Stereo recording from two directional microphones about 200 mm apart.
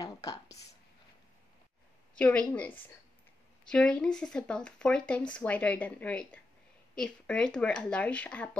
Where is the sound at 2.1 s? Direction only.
5° left (ahead or behind).